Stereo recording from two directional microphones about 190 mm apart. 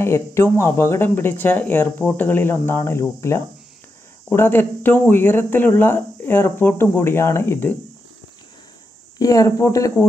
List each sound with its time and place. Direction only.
0.0 s speech: 15° left (ahead or behind)
9.2 s speech: 20° left (ahead or behind)